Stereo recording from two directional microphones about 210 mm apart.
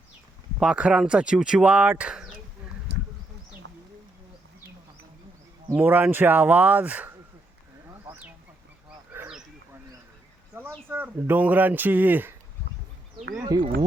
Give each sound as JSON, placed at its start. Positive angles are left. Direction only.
{"t": 0.6, "sound": "speech", "side_deg": -5}
{"t": 3.6, "sound": "a sound", "side_deg": -60}
{"t": 5.6, "sound": "speech", "side_deg": -10}
{"t": 7.9, "sound": "a sound", "side_deg": -10}
{"t": 9.1, "sound": "wild animals", "side_deg": -5}
{"t": 10.5, "sound": "speech", "side_deg": -10}
{"t": 13.4, "sound": "speech", "side_deg": -20}